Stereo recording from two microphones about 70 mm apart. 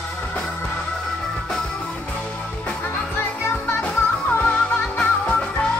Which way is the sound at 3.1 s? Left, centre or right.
Left.